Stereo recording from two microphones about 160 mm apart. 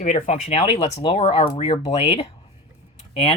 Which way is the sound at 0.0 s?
50° left (ahead or behind).